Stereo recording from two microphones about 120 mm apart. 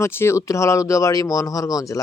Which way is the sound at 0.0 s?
20° left (ahead or behind).